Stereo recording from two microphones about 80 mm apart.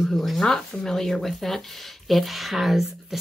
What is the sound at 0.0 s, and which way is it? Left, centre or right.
A woman's voice, centre.